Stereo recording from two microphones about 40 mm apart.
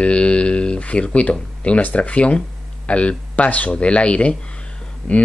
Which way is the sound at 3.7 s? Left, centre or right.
Left.